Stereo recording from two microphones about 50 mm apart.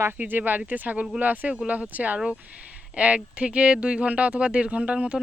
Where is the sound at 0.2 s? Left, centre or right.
Right.